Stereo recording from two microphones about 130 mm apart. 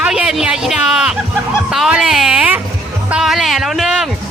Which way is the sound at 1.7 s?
5° right (ahead or behind).